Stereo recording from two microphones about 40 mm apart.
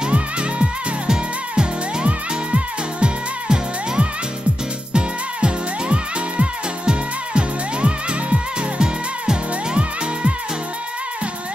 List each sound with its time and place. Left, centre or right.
0.0 s music: right